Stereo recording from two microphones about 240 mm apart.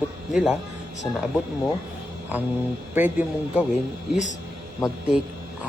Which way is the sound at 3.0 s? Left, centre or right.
Centre.